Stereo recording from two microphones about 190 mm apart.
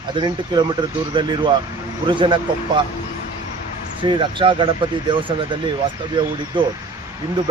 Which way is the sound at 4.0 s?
25° right (ahead or behind).